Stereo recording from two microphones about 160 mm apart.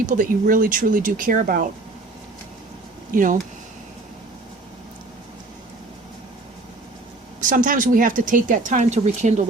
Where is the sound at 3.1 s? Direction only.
55° right (ahead or behind).